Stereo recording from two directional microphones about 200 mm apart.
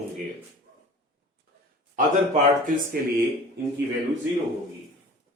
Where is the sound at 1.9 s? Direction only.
40° right (ahead or behind).